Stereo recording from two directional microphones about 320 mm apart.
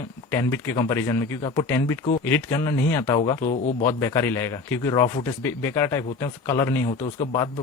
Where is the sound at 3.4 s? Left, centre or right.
Left.